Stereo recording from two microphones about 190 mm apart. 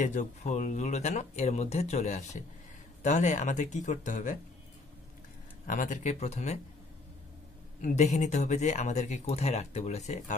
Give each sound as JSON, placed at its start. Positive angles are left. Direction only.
{"t": 0.0, "sound": "speech", "side_deg": 40}
{"t": 5.7, "sound": "speech", "side_deg": 45}
{"t": 7.8, "sound": "speech", "side_deg": 40}